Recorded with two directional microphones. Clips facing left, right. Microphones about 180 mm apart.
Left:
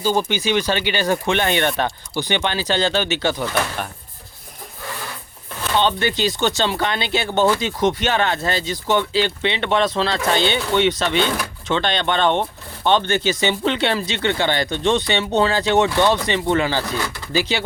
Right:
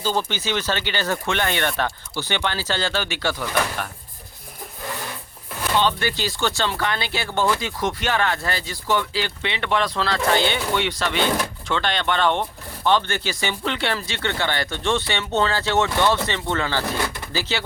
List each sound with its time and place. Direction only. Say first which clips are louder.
0.0 s speech: left 4 dB; 15° left (ahead or behind)
5.8 s speech: left 3 dB; 20° left (ahead or behind)